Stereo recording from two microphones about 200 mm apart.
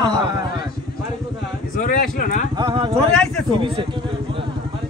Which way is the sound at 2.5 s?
25° right (ahead or behind).